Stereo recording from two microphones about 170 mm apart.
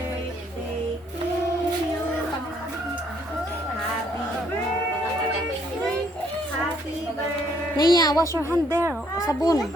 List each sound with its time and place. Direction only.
7.8 s a woman's voice: 25° left (ahead or behind)
8.7 s speech: 15° right (ahead or behind)
9.1 s a woman's voice: 20° left (ahead or behind)